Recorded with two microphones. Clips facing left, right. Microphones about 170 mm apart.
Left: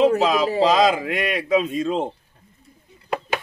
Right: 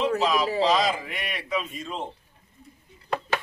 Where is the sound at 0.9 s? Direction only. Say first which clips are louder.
Left 10 dB; 90° left.